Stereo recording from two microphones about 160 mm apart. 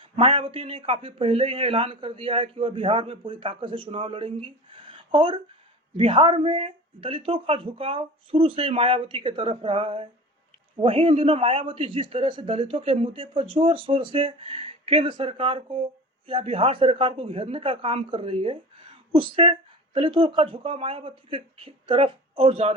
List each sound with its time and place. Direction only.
0.0 s a man's voice: 35° right (ahead or behind)